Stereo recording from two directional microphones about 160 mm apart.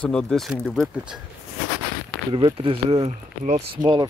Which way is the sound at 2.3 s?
30° right (ahead or behind).